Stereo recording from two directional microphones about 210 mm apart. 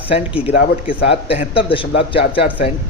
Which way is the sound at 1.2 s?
25° left (ahead or behind).